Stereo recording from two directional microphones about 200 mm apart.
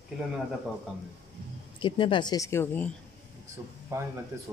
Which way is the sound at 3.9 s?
15° right (ahead or behind).